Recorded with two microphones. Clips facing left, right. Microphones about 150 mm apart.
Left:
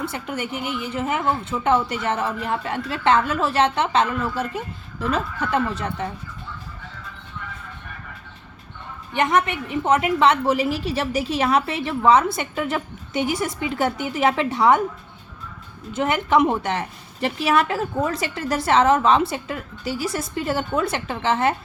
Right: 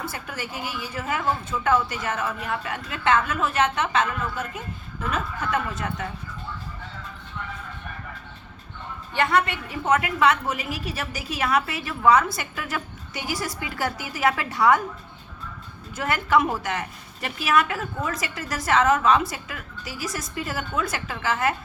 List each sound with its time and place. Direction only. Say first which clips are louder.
0.1 s a woman's voice: left 6 dB; 25° left (ahead or behind)
9.1 s a woman's voice: left 2 dB; 20° left (ahead or behind)
15.9 s a woman's voice: left 3 dB; 20° left (ahead or behind)